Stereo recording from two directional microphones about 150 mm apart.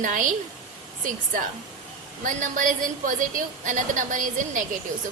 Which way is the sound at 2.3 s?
60° right (ahead or behind).